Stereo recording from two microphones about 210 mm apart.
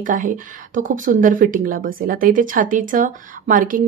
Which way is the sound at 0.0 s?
40° right (ahead or behind).